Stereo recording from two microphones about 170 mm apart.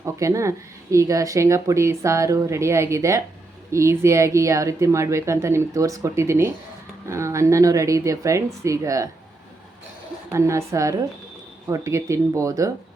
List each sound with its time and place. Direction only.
0.0 s speech: 20° right (ahead or behind)
10.3 s speech: 15° right (ahead or behind)